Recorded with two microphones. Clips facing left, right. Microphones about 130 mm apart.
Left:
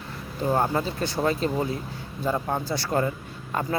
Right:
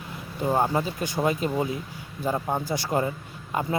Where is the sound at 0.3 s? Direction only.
10° right (ahead or behind).